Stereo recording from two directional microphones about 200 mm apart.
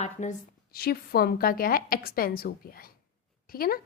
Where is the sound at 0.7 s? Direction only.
50° left (ahead or behind).